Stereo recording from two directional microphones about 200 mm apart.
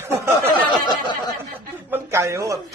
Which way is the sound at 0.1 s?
15° right (ahead or behind).